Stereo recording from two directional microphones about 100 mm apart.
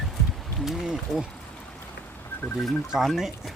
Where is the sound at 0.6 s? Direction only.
5° right (ahead or behind).